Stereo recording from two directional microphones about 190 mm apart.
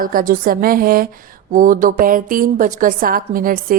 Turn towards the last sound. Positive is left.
turn(degrees=-45)  # may be behind; listen again after turning